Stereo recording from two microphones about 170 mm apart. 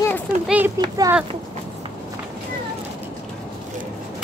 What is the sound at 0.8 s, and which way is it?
Speech, 20° right (ahead or behind).